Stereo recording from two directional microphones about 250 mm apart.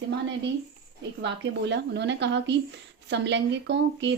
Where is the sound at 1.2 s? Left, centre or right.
Right.